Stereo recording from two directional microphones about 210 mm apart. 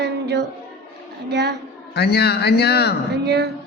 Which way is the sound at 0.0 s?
50° right (ahead or behind).